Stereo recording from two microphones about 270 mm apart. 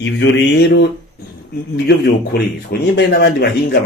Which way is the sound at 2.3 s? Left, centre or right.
Left.